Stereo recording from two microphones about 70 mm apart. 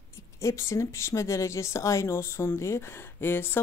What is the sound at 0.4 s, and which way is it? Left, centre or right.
Speech, left.